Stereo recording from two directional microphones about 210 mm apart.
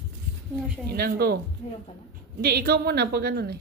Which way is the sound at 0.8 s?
45° right (ahead or behind).